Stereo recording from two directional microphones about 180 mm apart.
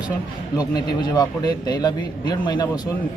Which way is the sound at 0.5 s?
20° left (ahead or behind).